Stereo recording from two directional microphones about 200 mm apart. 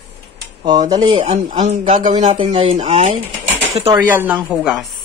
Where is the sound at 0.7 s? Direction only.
20° right (ahead or behind).